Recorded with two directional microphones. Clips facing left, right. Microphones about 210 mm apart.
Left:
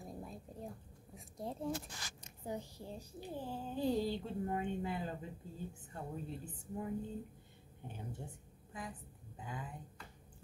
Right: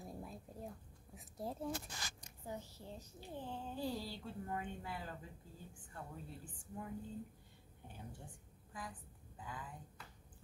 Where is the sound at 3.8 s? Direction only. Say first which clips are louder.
Left 10 dB; 20° left (ahead or behind).